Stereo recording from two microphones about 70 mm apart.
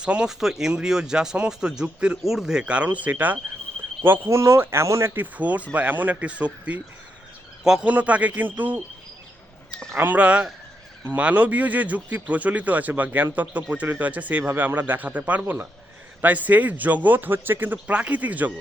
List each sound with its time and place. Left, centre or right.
0.0 s speech: centre; by 4.3 s right
4.3 s speech: right
5.1 s a man's voice: right
7.9 s speech: right
10.0 s speech: right